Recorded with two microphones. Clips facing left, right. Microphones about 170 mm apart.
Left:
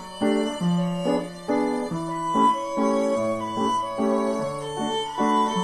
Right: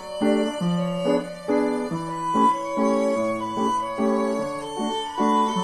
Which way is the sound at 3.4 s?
Centre (ahead or behind).